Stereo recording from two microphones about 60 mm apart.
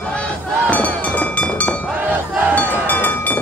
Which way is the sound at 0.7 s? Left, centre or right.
Left.